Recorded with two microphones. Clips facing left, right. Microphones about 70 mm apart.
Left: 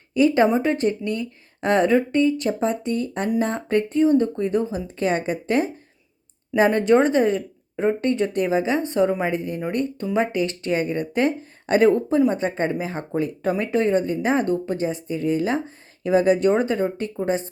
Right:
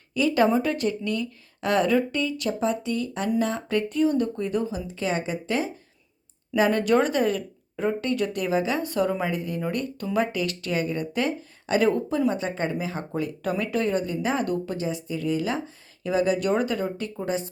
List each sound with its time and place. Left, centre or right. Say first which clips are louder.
0.1 s speech: left 5 dB; left
0.4 s a woman's voice: left 3 dB; left
6.6 s a woman's voice: left 4 dB; left